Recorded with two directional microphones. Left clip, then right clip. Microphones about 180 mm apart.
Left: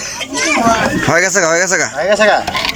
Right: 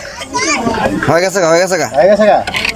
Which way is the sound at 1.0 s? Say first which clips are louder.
Right 2 dB; 10° right (ahead or behind).